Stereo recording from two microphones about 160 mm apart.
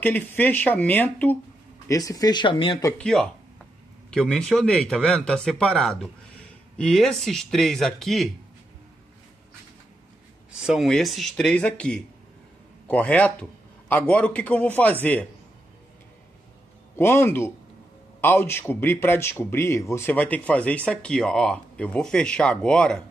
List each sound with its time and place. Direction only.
0.0 s speech: 10° left (ahead or behind); by 2.8 s 30° left (ahead or behind)
3.0 s speech: 5° left (ahead or behind)
10.5 s a man's voice: 5° right (ahead or behind)
16.9 s speech: 15° left (ahead or behind)